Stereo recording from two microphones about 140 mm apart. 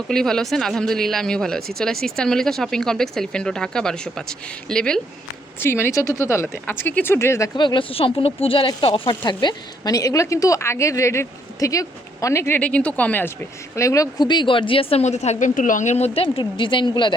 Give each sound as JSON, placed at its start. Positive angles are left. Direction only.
{"t": 0.1, "sound": "speech", "side_deg": 5}
{"t": 5.5, "sound": "speech", "side_deg": 15}
{"t": 7.5, "sound": "speech", "side_deg": 35}
{"t": 13.7, "sound": "a woman's voice", "side_deg": 25}